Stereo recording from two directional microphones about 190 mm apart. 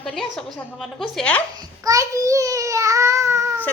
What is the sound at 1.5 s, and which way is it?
Babbling, 20° right (ahead or behind).